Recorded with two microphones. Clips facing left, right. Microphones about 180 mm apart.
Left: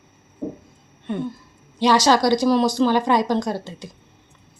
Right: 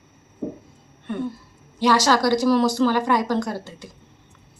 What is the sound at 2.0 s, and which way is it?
A woman's voice, 20° left (ahead or behind).